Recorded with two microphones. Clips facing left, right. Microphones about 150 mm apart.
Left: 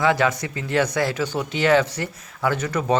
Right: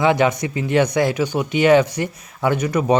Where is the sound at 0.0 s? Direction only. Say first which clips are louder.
Right 3 dB; 20° right (ahead or behind).